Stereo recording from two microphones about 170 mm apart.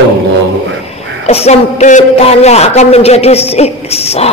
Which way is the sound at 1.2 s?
40° left (ahead or behind).